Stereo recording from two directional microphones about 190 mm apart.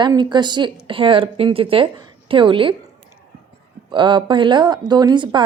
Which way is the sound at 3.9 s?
25° right (ahead or behind).